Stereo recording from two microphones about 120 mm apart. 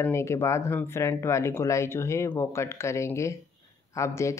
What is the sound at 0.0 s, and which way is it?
Speech, 20° left (ahead or behind).